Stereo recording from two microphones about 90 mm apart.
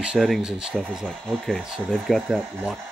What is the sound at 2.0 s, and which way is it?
Speech, centre (ahead or behind).